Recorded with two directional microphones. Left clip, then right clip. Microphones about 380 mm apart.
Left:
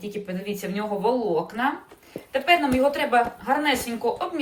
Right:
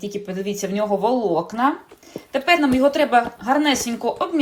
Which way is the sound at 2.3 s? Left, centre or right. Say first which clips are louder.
Right 2 dB; centre.